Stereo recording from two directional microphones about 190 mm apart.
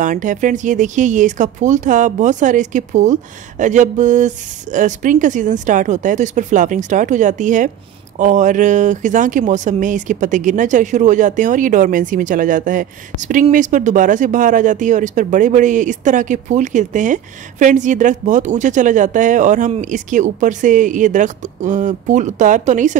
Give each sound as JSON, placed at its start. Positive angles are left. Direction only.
{"t": 0.0, "sound": "speech", "side_deg": -45}